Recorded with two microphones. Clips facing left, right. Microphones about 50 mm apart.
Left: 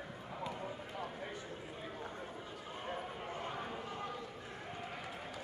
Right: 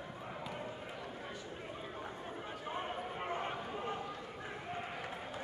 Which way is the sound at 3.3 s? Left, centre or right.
Right.